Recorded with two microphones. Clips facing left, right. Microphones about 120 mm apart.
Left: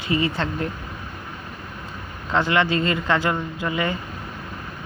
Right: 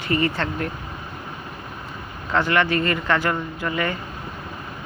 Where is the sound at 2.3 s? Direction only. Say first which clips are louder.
Even; 20° left (ahead or behind).